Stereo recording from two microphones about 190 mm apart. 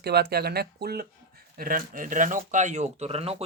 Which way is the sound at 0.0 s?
60° right (ahead or behind).